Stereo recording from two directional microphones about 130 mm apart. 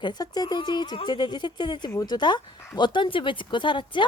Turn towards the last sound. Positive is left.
turn(degrees=40)  # may be behind; listen again after turning